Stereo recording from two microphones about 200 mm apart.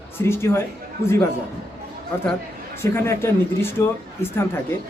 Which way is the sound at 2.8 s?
10° left (ahead or behind).